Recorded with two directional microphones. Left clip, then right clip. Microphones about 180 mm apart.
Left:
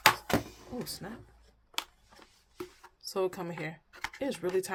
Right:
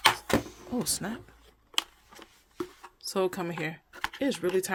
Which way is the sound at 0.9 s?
55° right (ahead or behind).